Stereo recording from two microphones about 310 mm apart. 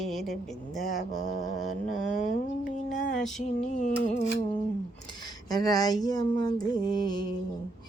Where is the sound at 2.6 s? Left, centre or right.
Left.